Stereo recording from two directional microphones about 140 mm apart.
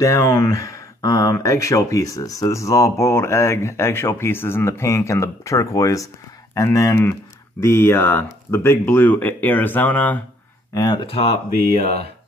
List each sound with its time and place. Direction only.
0.0 s speech: 20° left (ahead or behind)
10.7 s speech: 30° left (ahead or behind); by 12.0 s 45° left (ahead or behind)